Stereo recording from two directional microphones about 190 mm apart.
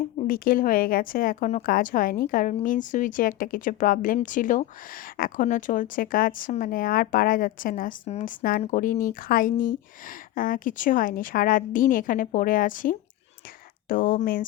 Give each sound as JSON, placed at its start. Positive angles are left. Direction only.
{"t": 0.3, "sound": "speech", "side_deg": 50}